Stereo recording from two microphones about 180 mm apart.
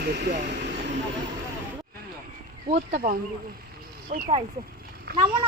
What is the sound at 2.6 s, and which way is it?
Speech, 55° right (ahead or behind).